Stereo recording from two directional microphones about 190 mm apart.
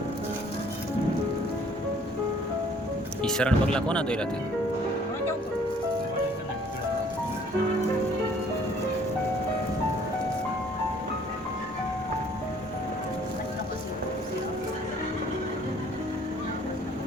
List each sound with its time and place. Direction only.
3.2 s speech: 5° left (ahead or behind)